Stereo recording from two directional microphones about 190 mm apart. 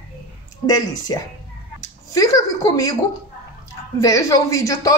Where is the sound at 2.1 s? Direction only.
15° left (ahead or behind).